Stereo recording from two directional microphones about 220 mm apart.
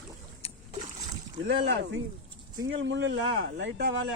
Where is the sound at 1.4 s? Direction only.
55° right (ahead or behind).